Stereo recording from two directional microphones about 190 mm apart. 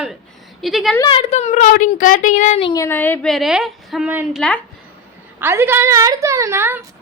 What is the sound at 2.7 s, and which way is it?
A woman's voice, 10° left (ahead or behind).